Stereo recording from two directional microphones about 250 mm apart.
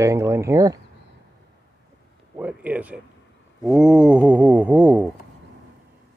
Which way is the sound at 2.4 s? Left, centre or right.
Centre.